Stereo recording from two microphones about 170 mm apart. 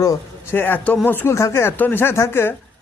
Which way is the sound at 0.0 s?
15° left (ahead or behind).